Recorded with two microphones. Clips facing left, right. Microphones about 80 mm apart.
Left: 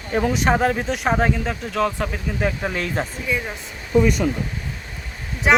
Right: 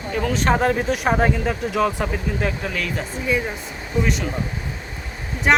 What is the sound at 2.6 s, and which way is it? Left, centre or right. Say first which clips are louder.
Speech: left 2 dB; left.